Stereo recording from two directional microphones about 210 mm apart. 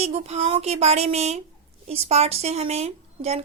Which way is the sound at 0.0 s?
30° right (ahead or behind).